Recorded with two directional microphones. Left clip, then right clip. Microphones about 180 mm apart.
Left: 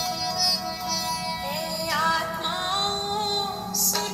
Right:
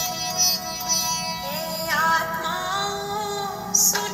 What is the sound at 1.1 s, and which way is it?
Music, 25° right (ahead or behind).